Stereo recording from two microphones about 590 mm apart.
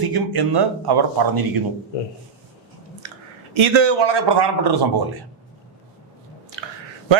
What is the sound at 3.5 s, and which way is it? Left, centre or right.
A man's voice, right.